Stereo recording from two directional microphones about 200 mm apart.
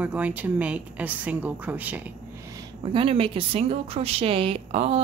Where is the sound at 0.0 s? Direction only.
5° right (ahead or behind).